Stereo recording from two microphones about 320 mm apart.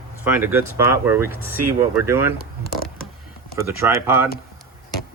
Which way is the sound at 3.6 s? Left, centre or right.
Centre.